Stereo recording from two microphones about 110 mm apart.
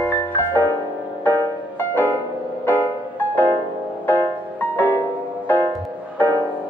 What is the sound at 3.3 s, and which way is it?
Music, 20° left (ahead or behind).